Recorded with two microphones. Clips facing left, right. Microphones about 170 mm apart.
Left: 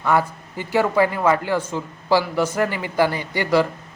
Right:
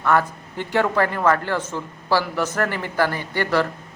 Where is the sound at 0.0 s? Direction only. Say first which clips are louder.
Even; 10° left (ahead or behind).